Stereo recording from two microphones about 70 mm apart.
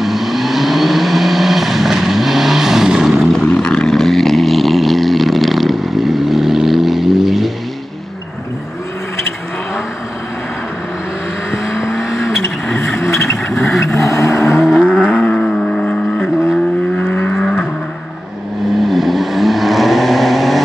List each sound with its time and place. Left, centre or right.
0.0 s vehicle: centre
11.8 s vehicle: centre
13.0 s vehicle: left
14.6 s vehicle: centre
15.3 s vehicle: centre
17.4 s vehicle: centre
18.8 s vehicle: centre